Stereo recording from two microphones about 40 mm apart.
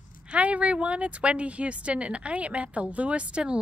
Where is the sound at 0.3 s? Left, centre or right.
Right.